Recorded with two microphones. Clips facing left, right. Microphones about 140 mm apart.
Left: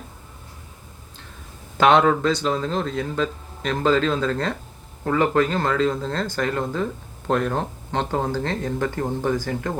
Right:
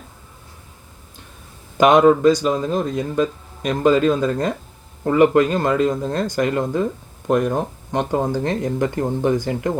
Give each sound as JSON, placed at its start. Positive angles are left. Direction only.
{"t": 1.8, "sound": "speech", "side_deg": -15}